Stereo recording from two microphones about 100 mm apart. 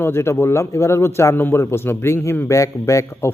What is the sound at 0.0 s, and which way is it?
Speech, 25° left (ahead or behind).